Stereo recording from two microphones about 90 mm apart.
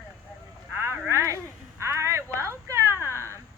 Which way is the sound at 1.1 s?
35° right (ahead or behind).